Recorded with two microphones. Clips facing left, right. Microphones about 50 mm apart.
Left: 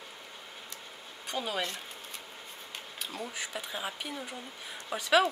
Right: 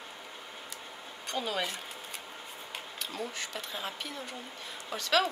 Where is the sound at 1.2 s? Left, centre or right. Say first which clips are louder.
Even; centre.